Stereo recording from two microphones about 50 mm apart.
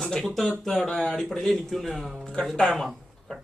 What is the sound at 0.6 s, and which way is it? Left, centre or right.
A man's voice, centre.